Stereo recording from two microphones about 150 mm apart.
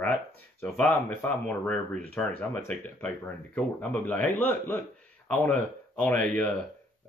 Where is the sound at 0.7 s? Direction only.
10° left (ahead or behind).